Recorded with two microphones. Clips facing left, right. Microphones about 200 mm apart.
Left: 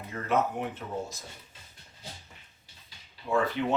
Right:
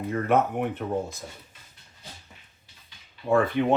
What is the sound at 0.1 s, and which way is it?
Speech, 55° right (ahead or behind).